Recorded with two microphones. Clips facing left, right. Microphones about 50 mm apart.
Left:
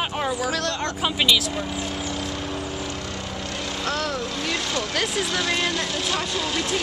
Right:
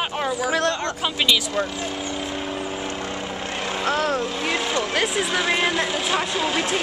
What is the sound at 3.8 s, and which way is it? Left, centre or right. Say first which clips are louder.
Speech: right 5 dB; right.